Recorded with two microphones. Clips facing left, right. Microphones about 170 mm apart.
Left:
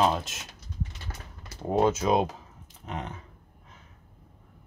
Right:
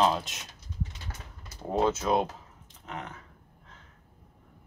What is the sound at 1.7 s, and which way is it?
Speech, 15° left (ahead or behind).